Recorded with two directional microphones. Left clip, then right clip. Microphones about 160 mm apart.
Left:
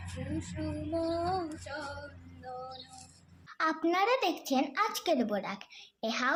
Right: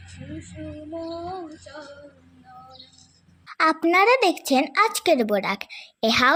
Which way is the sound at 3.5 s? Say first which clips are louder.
Right 10 dB; 35° right (ahead or behind).